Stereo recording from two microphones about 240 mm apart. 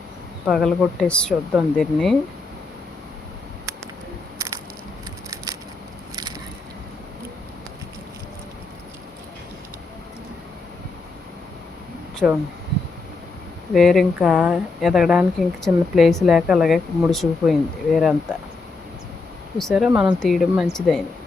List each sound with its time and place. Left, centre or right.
0.4 s speech: centre
4.4 s a sound: centre
12.2 s speech: centre
13.7 s speech: centre
19.5 s speech: centre